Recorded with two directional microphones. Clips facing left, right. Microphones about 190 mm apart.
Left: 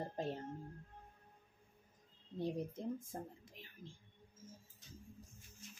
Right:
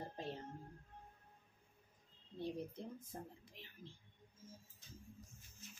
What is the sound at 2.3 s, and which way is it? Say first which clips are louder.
Speech: left 4 dB; 45° left (ahead or behind).